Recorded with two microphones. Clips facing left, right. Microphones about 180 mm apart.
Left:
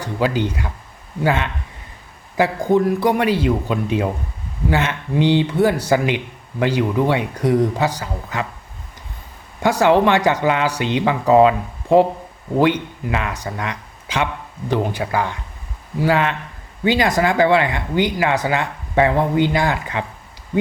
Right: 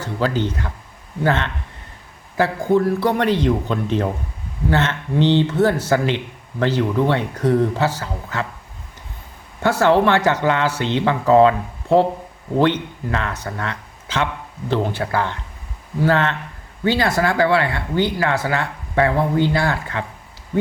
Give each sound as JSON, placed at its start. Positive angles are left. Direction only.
{"t": 0.0, "sound": "speech", "side_deg": 10}
{"t": 9.6, "sound": "speech", "side_deg": 15}